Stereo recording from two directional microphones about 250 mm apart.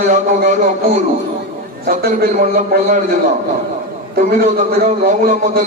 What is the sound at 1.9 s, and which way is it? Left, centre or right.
Speech, right.